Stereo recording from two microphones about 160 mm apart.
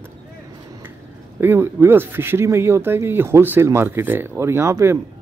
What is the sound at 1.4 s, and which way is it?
Speech, 15° right (ahead or behind).